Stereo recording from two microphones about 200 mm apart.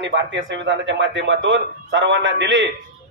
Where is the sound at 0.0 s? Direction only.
65° right (ahead or behind).